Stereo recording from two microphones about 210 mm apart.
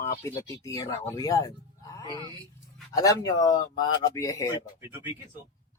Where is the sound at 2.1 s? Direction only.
20° right (ahead or behind).